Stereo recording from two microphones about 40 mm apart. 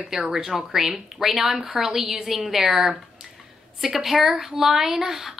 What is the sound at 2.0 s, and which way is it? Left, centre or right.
A woman's voice, centre.